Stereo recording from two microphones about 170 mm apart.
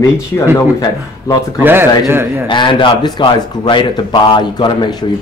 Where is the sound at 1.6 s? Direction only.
15° right (ahead or behind).